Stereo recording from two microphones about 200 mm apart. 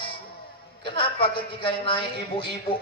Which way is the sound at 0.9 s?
25° left (ahead or behind).